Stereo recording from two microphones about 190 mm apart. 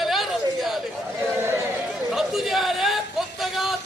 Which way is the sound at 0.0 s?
Centre (ahead or behind).